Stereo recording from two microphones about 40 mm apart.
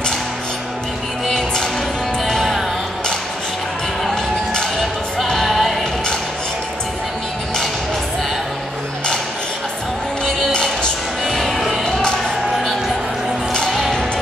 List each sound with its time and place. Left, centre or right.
1.2 s music: centre
4.0 s music: centre
4.7 s music: centre
10.5 s music: left
11.2 s music: centre